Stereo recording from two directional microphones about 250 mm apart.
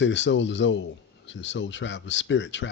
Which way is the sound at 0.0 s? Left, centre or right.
Left.